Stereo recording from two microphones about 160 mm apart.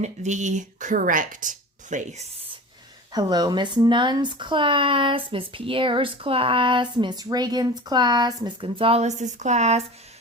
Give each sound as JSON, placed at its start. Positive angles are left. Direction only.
{"t": 0.0, "sound": "speech", "side_deg": -45}
{"t": 3.1, "sound": "speech", "side_deg": -25}
{"t": 8.8, "sound": "speech", "side_deg": -40}